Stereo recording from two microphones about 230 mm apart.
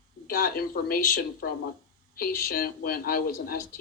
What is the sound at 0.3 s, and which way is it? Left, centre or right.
A woman's voice, left.